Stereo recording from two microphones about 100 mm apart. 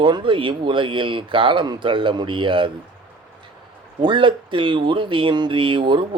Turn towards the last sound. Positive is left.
turn(degrees=-55)  # may be behind; listen again after turning